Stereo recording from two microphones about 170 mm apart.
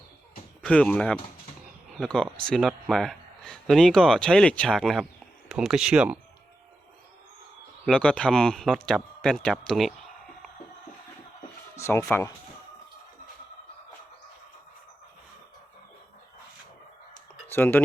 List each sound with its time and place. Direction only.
0.6 s speech: 5° left (ahead or behind)
7.9 s speech: 5° left (ahead or behind)
11.8 s speech: 15° left (ahead or behind)
17.5 s speech: 10° left (ahead or behind)